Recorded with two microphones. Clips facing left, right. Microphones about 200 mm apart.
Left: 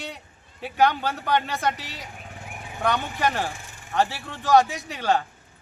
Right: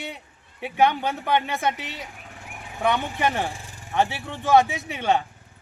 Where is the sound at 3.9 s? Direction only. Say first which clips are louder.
Right 1 dB; 20° right (ahead or behind).